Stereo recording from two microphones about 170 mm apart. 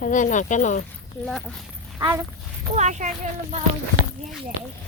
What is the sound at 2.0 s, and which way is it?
Speech, 20° right (ahead or behind).